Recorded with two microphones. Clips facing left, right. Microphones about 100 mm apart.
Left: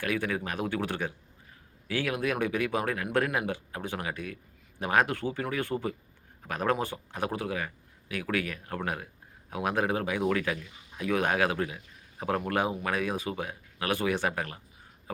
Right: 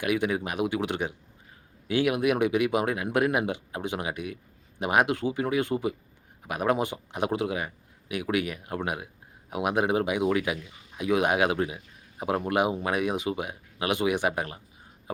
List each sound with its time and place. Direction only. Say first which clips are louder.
0.0 s speech: right 4 dB; 15° right (ahead or behind)